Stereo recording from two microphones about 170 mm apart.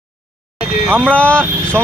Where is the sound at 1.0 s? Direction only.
10° left (ahead or behind).